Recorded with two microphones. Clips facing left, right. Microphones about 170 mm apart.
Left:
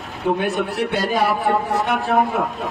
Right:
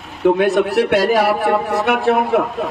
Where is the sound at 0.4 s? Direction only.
85° right.